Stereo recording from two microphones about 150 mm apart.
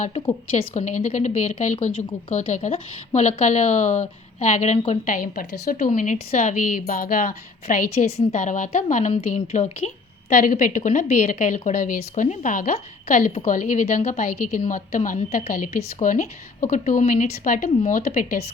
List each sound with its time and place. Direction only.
0.0 s a woman's voice: 40° left (ahead or behind); by 7.9 s 60° left (ahead or behind)
7.9 s a woman's voice: 45° left (ahead or behind); by 17.7 s 60° left (ahead or behind)
17.7 s speech: 40° left (ahead or behind)
17.9 s a woman's voice: 55° left (ahead or behind)